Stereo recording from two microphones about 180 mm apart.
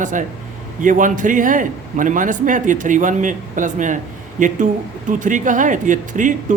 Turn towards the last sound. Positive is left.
turn(degrees=-45)  # may be behind; listen again after turning